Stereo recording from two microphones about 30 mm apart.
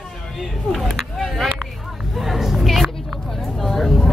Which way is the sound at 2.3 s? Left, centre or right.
Centre.